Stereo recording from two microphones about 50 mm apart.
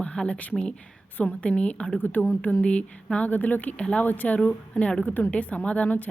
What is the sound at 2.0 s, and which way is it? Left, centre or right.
Speech, left.